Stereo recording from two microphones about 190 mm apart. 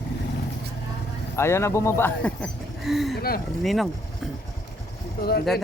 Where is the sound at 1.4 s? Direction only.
15° left (ahead or behind).